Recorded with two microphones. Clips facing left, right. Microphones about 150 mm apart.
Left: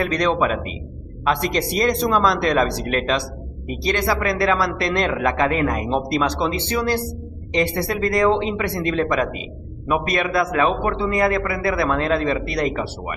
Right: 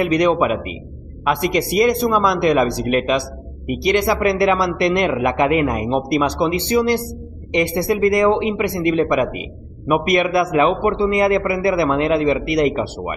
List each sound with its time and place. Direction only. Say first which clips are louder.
0.0 s a man's voice: right 4 dB; 15° right (ahead or behind)